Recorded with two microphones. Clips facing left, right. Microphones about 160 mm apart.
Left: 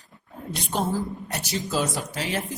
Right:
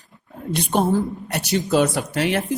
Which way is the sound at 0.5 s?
60° right (ahead or behind).